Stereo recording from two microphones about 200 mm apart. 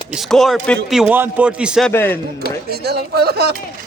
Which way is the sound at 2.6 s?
50° right (ahead or behind).